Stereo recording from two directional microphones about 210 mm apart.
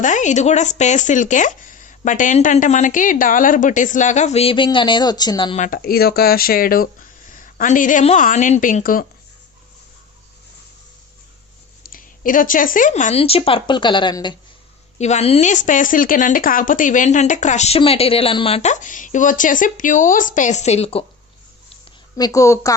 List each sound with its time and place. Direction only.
0.0 s speech: 35° left (ahead or behind)
5.6 s speech: 45° left (ahead or behind)
11.9 s speech: 40° left (ahead or behind); by 14.3 s 20° left (ahead or behind)
14.9 s speech: 30° left (ahead or behind)
22.1 s a woman's voice: 15° left (ahead or behind)